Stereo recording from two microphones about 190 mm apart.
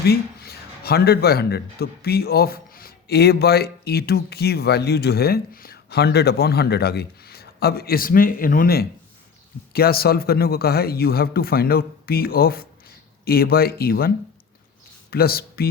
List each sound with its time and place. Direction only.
0.0 s a man's voice: 55° left (ahead or behind)
15.1 s speech: 55° left (ahead or behind)